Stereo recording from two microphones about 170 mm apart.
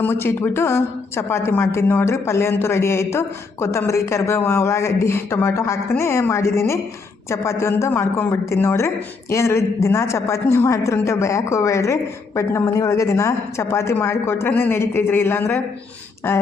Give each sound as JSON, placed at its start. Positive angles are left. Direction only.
{"t": 0.0, "sound": "speech", "side_deg": 15}